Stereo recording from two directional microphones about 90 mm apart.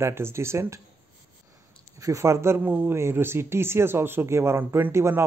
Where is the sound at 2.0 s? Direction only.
35° right (ahead or behind).